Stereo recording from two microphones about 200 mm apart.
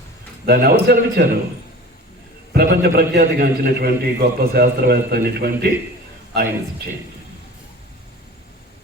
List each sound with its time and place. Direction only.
0.4 s a man's voice: 50° right (ahead or behind)
2.5 s a man's voice: 50° right (ahead or behind)